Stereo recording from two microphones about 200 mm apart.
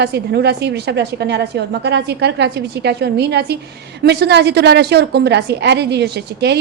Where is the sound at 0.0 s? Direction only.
55° right (ahead or behind).